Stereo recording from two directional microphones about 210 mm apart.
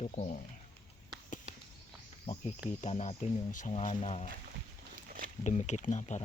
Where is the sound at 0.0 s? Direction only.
35° left (ahead or behind).